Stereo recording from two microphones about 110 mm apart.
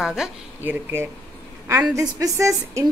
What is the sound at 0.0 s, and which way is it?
Speech, 5° right (ahead or behind).